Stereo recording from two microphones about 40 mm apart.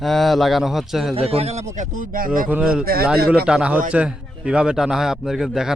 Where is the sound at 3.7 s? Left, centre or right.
Right.